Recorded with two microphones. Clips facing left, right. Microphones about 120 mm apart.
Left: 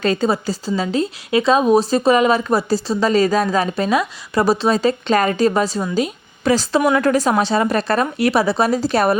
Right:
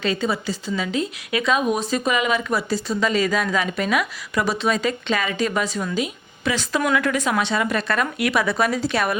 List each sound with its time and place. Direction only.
0.0 s a woman's voice: 40° left (ahead or behind)